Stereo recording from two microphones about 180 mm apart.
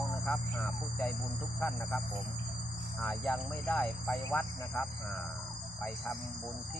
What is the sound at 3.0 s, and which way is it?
Speech, 5° left (ahead or behind).